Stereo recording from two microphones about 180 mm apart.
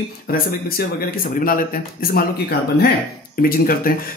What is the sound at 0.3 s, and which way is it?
Speech, 55° left (ahead or behind).